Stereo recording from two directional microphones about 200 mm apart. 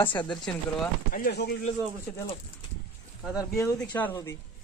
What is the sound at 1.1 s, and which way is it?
Speech, 50° left (ahead or behind).